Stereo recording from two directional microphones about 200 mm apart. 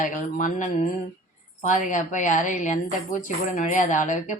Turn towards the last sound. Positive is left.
turn(degrees=40)  # may be behind; listen again after turning